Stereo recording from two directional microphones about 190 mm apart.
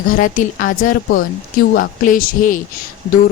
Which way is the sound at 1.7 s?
45° left (ahead or behind).